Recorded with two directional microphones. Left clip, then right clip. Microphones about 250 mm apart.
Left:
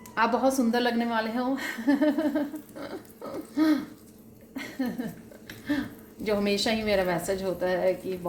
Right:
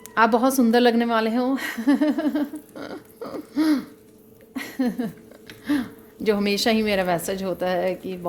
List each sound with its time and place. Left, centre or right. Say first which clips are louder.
0.1 s a woman's voice: right 6 dB; right